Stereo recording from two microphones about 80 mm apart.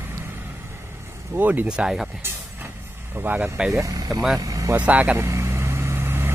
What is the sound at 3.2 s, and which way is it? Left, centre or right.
Speech, right.